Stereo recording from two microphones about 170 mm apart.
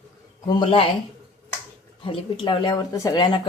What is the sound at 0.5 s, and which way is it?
Speech, 30° left (ahead or behind).